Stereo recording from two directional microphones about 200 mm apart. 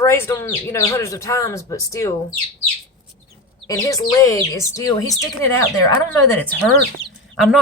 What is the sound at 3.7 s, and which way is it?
Speech, 15° left (ahead or behind).